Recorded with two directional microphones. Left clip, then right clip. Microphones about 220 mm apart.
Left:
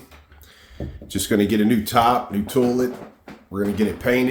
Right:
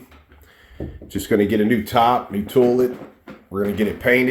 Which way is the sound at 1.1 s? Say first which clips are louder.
Right 2 dB; 25° left (ahead or behind).